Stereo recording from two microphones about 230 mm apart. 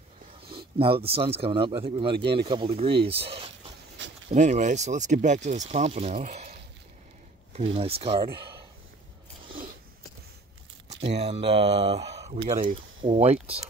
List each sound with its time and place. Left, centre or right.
0.7 s speech: right
2.1 s speech: right
2.4 s speech: right
7.5 s speech: right
10.9 s speech: right